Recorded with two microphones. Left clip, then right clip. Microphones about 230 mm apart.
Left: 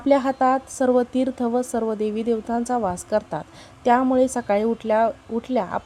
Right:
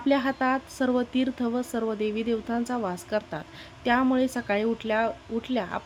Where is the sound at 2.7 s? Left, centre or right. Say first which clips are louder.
Left 10 dB; centre.